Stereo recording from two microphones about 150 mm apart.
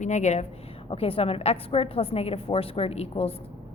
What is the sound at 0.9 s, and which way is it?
A woman's voice, 40° left (ahead or behind).